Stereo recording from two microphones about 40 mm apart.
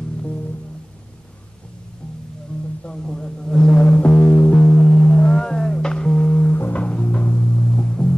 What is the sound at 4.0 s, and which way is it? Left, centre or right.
Music, left.